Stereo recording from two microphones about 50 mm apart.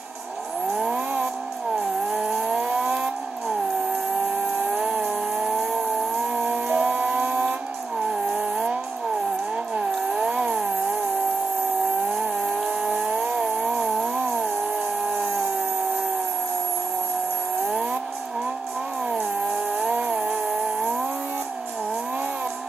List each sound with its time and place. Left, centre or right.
0.7 s vehicle: centre
2.0 s vehicle: centre
4.3 s chainsaw: right
5.4 s vehicle: centre
8.1 s vehicle: centre
9.8 s a sound: centre
12.0 s vehicle: centre
12.4 s chainsaw: centre
12.9 s a sound: right
19.0 s chainsaw: centre